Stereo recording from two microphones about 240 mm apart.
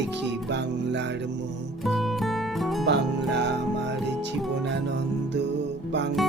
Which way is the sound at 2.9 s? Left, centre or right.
Right.